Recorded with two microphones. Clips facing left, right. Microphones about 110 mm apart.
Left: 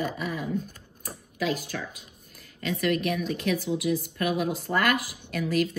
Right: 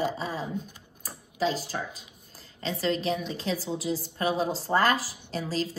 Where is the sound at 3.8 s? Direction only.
60° left (ahead or behind).